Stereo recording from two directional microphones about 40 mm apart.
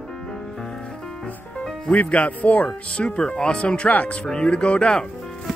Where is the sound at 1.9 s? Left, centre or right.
Left.